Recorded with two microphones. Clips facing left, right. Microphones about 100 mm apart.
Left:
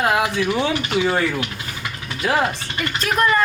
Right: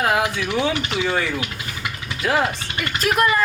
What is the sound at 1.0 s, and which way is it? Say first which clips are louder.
Speech: left 1 dB; 25° left (ahead or behind).